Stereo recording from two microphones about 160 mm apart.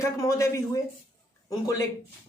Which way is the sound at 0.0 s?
20° left (ahead or behind).